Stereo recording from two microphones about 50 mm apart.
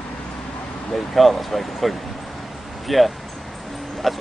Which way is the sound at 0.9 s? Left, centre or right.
Centre.